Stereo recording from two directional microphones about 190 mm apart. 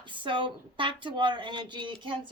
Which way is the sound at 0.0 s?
25° right (ahead or behind).